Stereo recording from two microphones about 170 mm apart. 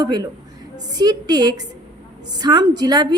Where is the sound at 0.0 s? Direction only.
25° right (ahead or behind).